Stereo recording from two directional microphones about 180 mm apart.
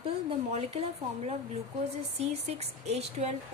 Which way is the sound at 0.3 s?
35° right (ahead or behind).